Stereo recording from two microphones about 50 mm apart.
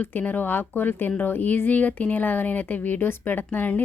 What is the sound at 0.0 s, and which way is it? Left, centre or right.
A woman's voice, left.